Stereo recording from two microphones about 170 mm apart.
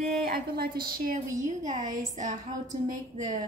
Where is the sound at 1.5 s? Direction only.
45° right (ahead or behind).